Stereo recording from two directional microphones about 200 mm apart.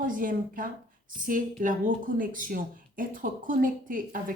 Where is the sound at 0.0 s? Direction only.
45° right (ahead or behind).